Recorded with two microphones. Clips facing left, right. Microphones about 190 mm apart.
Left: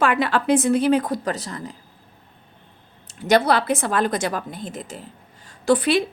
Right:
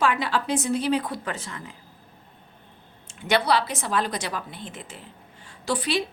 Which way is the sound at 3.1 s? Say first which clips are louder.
Left 5 dB; 40° left (ahead or behind).